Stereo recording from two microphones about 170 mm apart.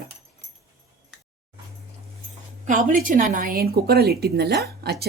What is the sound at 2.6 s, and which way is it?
Speech, 50° right (ahead or behind).